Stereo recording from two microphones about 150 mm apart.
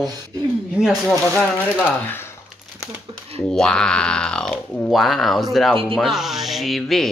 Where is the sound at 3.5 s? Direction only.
5° left (ahead or behind).